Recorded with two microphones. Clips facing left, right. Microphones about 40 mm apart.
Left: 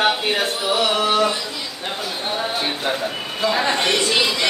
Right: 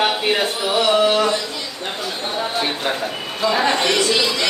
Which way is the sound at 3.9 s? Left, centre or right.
Centre.